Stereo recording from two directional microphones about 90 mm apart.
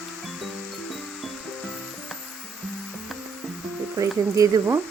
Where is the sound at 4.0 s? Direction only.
35° right (ahead or behind).